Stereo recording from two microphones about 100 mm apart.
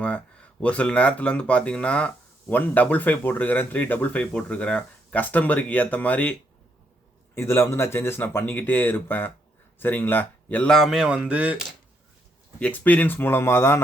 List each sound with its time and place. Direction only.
0.0 s speech: 10° left (ahead or behind)
7.3 s speech: 25° left (ahead or behind)
10.7 s speech: centre (ahead or behind)
12.5 s speech: 15° left (ahead or behind)